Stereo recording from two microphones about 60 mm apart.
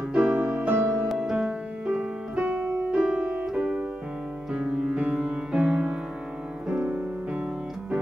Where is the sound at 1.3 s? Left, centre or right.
Centre.